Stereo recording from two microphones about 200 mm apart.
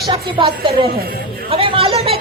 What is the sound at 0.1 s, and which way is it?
A woman's voice, 25° right (ahead or behind).